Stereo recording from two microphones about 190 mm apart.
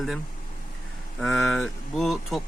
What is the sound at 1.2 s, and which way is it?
Speech, centre (ahead or behind).